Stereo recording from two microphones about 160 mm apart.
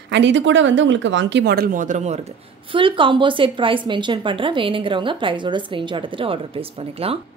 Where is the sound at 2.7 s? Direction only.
35° right (ahead or behind).